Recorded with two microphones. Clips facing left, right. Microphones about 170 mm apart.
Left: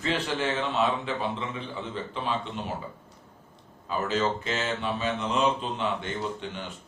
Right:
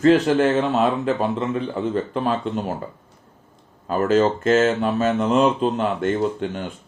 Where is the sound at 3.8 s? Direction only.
50° right (ahead or behind).